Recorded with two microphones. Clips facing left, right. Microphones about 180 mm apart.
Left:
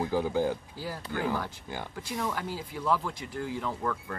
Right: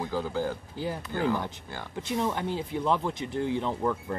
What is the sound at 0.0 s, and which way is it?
Speech, 15° left (ahead or behind).